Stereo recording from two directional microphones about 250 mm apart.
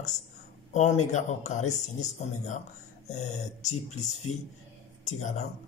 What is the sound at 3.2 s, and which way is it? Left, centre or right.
Speech, left.